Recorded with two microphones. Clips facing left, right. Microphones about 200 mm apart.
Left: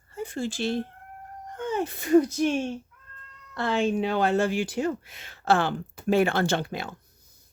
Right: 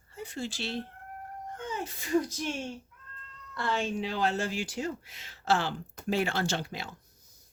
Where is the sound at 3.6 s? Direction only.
55° left (ahead or behind).